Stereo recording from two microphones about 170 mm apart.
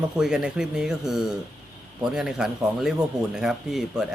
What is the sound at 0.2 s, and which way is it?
Speech, 5° right (ahead or behind).